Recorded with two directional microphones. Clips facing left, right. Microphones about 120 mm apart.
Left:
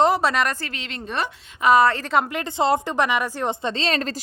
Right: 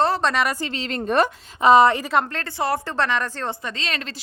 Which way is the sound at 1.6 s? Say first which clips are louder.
Right 3 dB; 25° right (ahead or behind).